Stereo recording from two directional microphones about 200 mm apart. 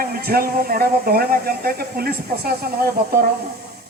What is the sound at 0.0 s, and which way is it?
Speech, 50° right (ahead or behind).